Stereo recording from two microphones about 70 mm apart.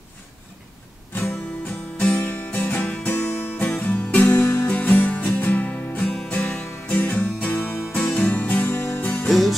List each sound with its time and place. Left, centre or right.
2.0 s music: left
6.1 s music: centre; by 9.3 s left
9.3 s music: centre